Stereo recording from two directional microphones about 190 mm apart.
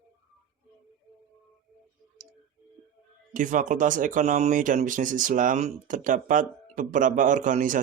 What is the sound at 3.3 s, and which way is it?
Speech, 40° right (ahead or behind).